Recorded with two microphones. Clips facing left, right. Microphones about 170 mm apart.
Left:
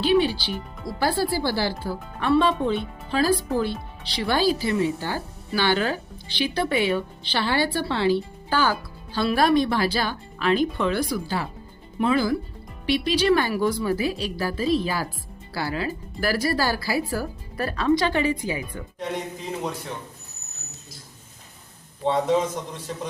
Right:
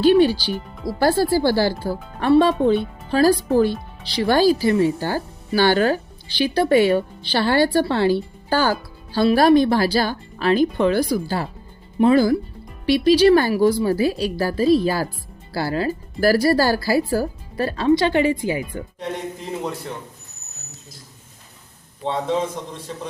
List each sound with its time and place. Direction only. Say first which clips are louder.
0.0 s speech: right 6 dB; 40° right (ahead or behind)